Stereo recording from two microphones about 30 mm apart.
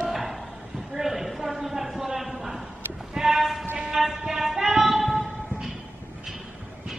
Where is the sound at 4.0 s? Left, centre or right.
Centre.